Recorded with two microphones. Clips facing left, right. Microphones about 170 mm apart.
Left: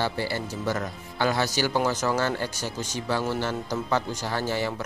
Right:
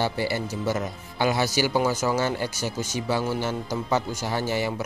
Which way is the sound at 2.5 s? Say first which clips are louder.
Right 3 dB; 15° left (ahead or behind).